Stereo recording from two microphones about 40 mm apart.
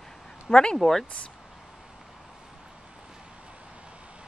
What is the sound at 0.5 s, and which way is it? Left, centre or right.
Speech, left.